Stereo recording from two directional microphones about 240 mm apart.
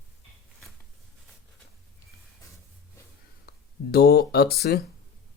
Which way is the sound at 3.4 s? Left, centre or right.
Left.